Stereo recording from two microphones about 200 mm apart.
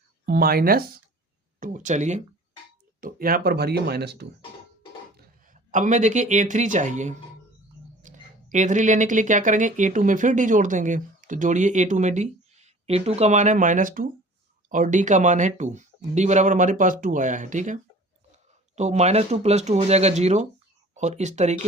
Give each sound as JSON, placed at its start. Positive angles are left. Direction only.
{"t": 0.3, "sound": "speech", "side_deg": -50}
{"t": 5.1, "sound": "speech", "side_deg": -40}
{"t": 18.8, "sound": "speech", "side_deg": -35}